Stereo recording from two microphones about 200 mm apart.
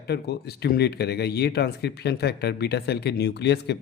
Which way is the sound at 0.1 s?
55° left (ahead or behind).